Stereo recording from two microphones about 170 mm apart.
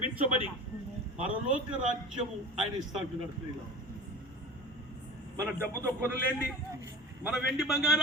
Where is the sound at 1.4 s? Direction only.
5° right (ahead or behind).